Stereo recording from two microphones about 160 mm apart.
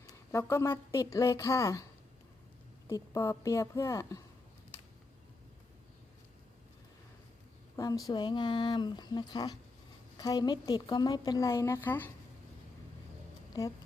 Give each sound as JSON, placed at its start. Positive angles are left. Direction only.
{"t": 0.1, "sound": "a woman's voice", "side_deg": 15}
{"t": 7.8, "sound": "a woman's voice", "side_deg": 25}
{"t": 13.5, "sound": "a woman's voice", "side_deg": 25}